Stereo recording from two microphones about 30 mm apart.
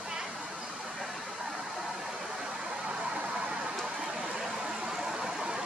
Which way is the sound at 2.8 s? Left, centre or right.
Right.